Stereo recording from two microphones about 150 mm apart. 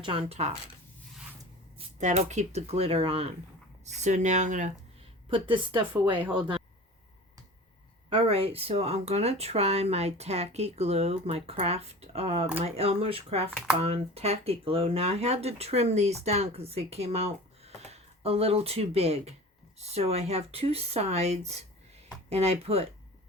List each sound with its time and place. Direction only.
0.0 s speech: 40° right (ahead or behind)
2.0 s speech: 50° right (ahead or behind)
3.8 s speech: 50° right (ahead or behind)
5.3 s speech: 35° right (ahead or behind)
5.9 s speech: 10° right (ahead or behind)
8.1 s speech: 40° right (ahead or behind)